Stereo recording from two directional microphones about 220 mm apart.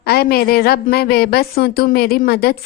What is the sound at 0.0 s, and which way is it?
A woman's voice, 45° left (ahead or behind).